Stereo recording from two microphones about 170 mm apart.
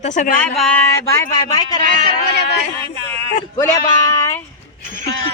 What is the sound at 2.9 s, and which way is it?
Speech, 35° right (ahead or behind).